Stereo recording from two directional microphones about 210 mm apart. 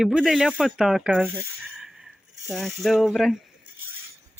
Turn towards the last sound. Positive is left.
turn(degrees=0)  # may be behind; listen again after turning